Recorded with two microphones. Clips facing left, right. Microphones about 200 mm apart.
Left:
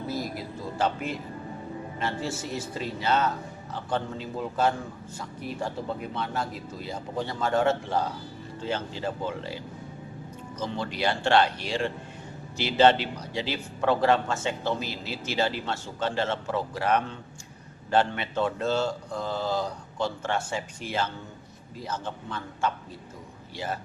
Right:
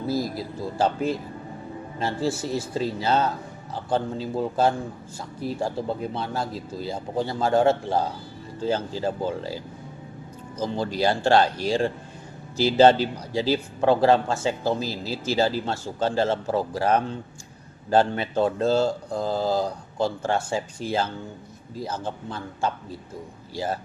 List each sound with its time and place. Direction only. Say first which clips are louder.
0.1 s a man's voice: right 7 dB; 35° right (ahead or behind)
10.6 s a man's voice: right 5 dB; 35° right (ahead or behind)